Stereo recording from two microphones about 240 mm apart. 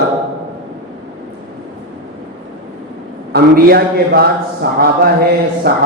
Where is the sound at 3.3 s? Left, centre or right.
Right.